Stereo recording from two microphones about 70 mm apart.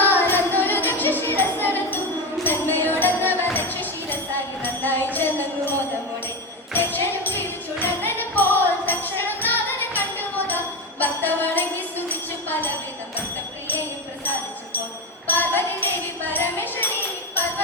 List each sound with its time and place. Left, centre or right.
0.0 s music: left
3.4 s tambourine: left
4.6 s music: left
6.7 s music: left
15.3 s music: left